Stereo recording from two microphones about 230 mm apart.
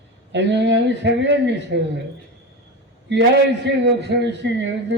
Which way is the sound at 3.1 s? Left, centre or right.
Right.